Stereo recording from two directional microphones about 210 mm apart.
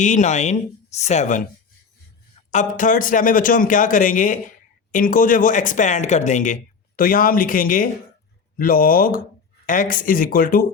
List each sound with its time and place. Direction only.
0.0 s a man's voice: 35° left (ahead or behind)
2.5 s a man's voice: 35° left (ahead or behind)